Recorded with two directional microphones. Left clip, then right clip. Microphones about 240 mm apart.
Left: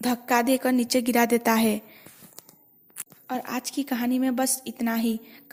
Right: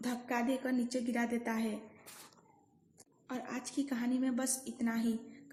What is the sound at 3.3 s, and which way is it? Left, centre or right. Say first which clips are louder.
A woman's voice: left 12 dB; left.